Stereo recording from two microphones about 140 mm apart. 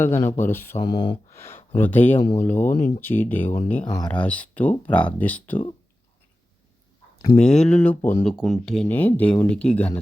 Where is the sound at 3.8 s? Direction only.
30° left (ahead or behind).